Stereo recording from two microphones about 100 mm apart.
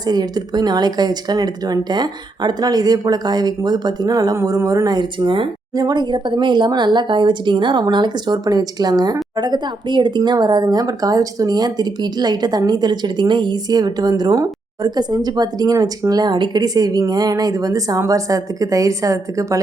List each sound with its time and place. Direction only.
0.0 s speech: 40° right (ahead or behind)